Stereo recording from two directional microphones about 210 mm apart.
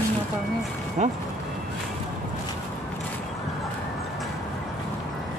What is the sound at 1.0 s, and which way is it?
Speech, 35° right (ahead or behind).